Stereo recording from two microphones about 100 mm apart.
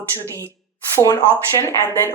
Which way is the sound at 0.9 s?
35° left (ahead or behind).